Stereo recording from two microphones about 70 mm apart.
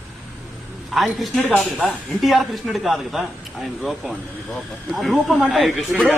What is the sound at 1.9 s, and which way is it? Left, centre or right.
A man's voice, centre.